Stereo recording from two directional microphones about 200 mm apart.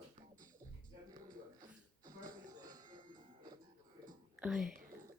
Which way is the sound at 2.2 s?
45° right (ahead or behind).